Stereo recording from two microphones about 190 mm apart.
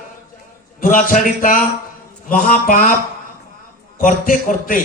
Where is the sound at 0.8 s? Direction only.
45° left (ahead or behind).